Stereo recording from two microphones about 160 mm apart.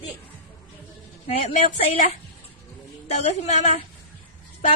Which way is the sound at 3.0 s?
45° left (ahead or behind).